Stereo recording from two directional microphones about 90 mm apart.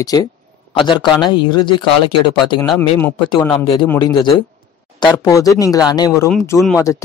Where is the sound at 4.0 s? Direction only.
50° left (ahead or behind).